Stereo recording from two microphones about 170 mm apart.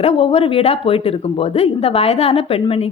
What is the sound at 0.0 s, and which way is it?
Speech, 35° left (ahead or behind).